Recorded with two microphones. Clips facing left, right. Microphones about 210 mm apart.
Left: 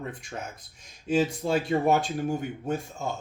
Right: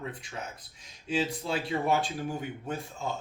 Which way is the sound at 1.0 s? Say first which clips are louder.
Left 6 dB; 45° left (ahead or behind).